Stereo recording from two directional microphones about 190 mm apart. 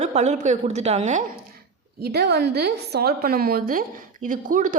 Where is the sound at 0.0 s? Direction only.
35° right (ahead or behind).